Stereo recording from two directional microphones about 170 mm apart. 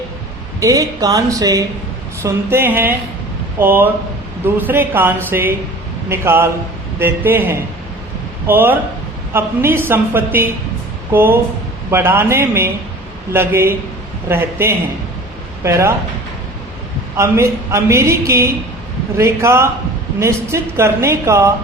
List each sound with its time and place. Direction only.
0.6 s speech: 20° right (ahead or behind)
17.2 s speech: 15° right (ahead or behind)